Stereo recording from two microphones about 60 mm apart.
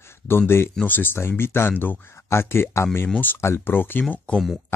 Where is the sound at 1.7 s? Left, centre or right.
Left.